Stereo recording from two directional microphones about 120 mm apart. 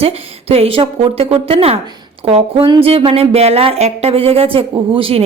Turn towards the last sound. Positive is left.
turn(degrees=-50)  # may be behind; listen again after turning